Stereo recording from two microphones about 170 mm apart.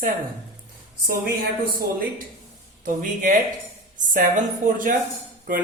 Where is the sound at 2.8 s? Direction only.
50° right (ahead or behind).